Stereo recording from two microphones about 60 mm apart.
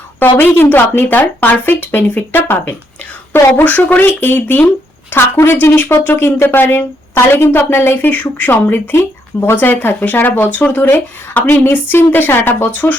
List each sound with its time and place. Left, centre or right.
0.2 s speech: left